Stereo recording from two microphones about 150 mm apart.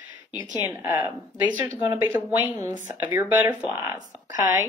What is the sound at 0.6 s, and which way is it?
A woman's voice, 10° right (ahead or behind).